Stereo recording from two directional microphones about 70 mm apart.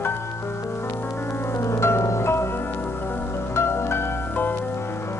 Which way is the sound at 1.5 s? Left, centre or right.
Left.